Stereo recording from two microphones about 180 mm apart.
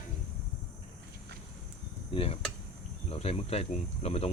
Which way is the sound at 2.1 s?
35° left (ahead or behind).